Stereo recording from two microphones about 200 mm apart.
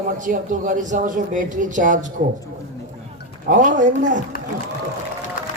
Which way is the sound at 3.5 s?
40° right (ahead or behind).